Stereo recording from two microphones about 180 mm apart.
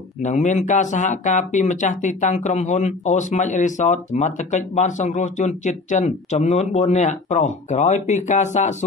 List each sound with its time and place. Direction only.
0.2 s speech: 40° left (ahead or behind)